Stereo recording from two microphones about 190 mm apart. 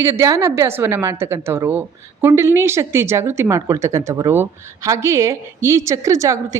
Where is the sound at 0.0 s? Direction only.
15° right (ahead or behind).